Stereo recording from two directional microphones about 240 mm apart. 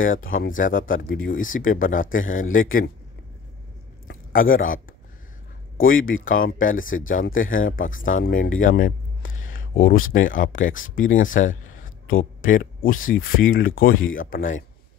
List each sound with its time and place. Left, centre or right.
0.2 s speech: left
4.3 s speech: left
6.0 s speech: left
9.4 s a sound: left
10.1 s speech: left